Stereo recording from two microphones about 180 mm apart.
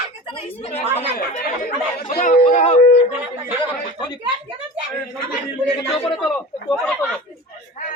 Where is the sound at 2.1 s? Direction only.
50° left (ahead or behind).